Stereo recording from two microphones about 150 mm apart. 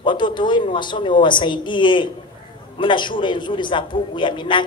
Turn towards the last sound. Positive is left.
turn(degrees=30)  # may be behind; listen again after turning